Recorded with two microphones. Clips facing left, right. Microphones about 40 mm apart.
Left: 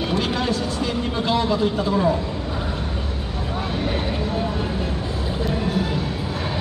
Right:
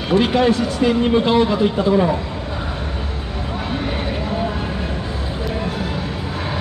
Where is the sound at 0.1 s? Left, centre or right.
Right.